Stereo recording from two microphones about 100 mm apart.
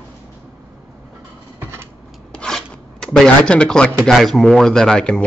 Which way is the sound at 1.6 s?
25° right (ahead or behind).